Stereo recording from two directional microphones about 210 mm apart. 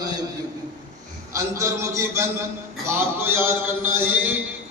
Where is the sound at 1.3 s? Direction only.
15° right (ahead or behind).